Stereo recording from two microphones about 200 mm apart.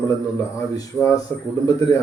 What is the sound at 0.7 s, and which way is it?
Speech, 15° left (ahead or behind).